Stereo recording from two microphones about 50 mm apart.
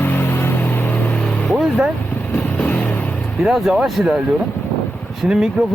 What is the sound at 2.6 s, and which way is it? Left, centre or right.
Vehicle, left.